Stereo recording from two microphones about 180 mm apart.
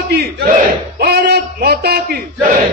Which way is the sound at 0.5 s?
60° right (ahead or behind).